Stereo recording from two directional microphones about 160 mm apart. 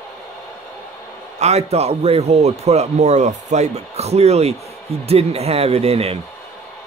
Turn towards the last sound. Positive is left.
turn(degrees=-40)  # may be behind; listen again after turning